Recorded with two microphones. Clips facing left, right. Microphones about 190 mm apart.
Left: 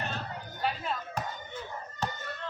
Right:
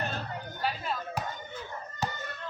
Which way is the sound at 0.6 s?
Centre (ahead or behind).